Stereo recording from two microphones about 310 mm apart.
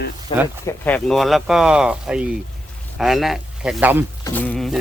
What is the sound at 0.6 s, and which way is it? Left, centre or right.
Speech, centre.